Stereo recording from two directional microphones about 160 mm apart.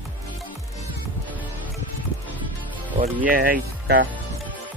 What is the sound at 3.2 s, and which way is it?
Speech, 65° right (ahead or behind).